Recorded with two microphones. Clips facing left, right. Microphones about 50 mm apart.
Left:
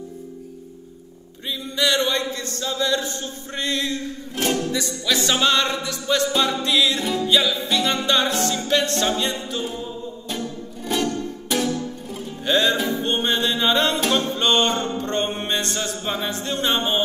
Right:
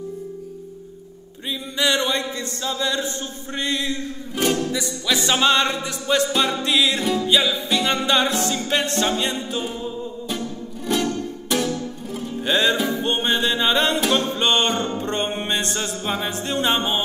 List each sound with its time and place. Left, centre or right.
1.5 s speech: right
5.0 s speech: right
10.2 s music: centre
12.4 s speech: right